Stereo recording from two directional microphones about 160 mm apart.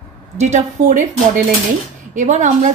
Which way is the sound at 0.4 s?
50° right (ahead or behind).